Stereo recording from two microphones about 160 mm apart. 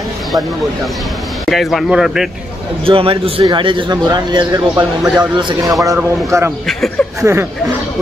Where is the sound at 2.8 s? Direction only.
35° right (ahead or behind).